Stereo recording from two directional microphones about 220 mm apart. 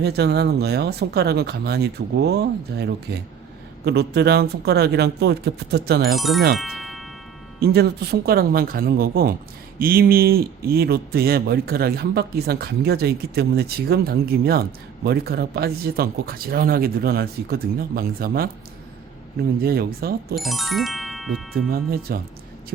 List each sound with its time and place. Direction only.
0.0 s speech: 50° right (ahead or behind)
6.1 s speech: centre (ahead or behind)
7.6 s speech: 45° right (ahead or behind)
20.3 s speech: centre (ahead or behind)
22.1 s speech: 45° right (ahead or behind)